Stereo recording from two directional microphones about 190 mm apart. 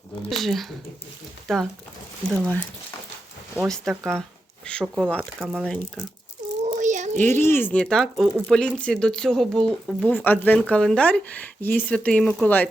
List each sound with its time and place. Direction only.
0.3 s speech: centre (ahead or behind)
3.7 s speech: centre (ahead or behind)
6.7 s a sound: 40° right (ahead or behind)
7.3 s speech: 10° left (ahead or behind)